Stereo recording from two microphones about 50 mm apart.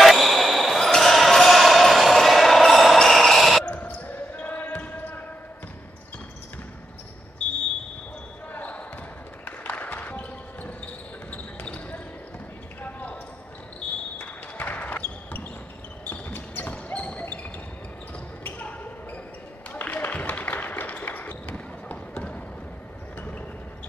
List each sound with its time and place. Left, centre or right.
0.0 s basketball bounce: centre
3.6 s basketball bounce: left
8.5 s basketball bounce: left
9.4 s music: left
11.2 s basketball bounce: left
18.4 s basketball bounce: left
19.7 s music: left
20.1 s basketball bounce: left